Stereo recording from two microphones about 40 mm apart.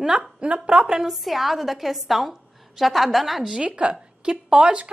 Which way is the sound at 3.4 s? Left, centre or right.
Centre.